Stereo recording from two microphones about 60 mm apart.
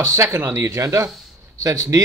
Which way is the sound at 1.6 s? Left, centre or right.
Right.